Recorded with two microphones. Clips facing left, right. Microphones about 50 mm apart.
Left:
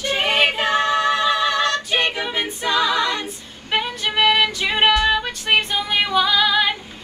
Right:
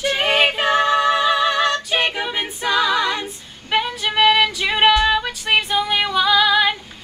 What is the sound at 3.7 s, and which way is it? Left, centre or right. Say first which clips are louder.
Music: right 2 dB; centre.